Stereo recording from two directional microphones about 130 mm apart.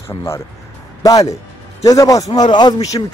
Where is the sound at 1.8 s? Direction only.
25° left (ahead or behind).